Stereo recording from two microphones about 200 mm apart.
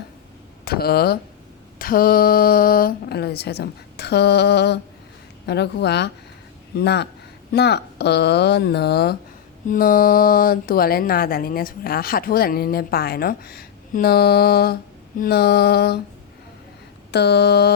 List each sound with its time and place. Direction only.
0.6 s speech: 50° left (ahead or behind)
17.1 s speech: 55° left (ahead or behind)